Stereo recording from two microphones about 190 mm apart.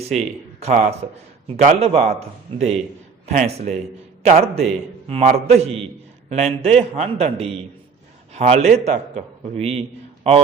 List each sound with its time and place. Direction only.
0.2 s a man's voice: 35° right (ahead or behind)